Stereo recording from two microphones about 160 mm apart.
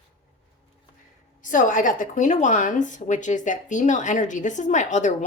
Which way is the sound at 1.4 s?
55° left (ahead or behind).